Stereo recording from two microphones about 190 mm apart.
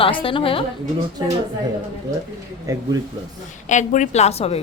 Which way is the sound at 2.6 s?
15° right (ahead or behind).